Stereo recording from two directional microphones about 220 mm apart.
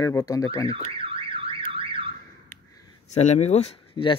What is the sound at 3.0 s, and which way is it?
Speech, 30° left (ahead or behind).